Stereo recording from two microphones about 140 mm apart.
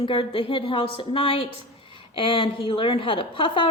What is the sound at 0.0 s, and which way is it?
A woman's voice, 40° left (ahead or behind).